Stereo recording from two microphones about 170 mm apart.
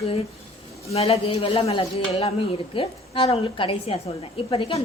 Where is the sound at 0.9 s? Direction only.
35° left (ahead or behind).